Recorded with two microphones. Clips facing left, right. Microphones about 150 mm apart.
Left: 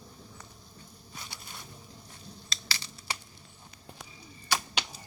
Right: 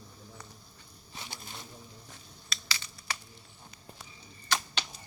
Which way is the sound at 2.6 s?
35° left (ahead or behind).